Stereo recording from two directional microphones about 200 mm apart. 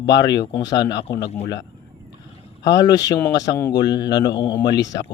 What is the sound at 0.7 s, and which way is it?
Speech, 60° left (ahead or behind).